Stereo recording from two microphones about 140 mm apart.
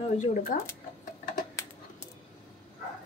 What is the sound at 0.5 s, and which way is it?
Speech, 70° left (ahead or behind).